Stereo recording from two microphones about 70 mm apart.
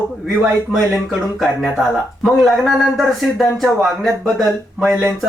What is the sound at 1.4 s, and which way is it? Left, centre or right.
Speech, centre.